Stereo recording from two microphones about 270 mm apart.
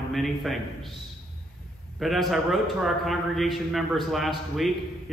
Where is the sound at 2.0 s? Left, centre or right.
Centre.